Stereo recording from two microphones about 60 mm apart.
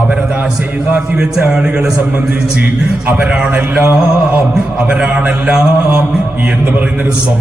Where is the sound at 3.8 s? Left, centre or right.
Right.